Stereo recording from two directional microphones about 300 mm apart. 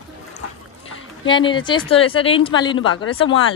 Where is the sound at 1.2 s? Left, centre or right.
Centre.